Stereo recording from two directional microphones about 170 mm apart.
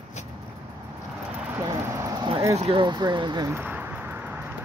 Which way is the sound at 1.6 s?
20° right (ahead or behind).